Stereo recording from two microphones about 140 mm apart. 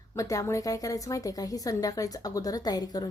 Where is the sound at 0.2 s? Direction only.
25° left (ahead or behind).